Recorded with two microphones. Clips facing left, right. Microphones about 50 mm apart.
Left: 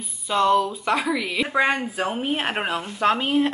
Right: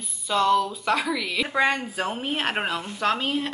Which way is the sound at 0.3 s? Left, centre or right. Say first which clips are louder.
Left 2 dB; centre.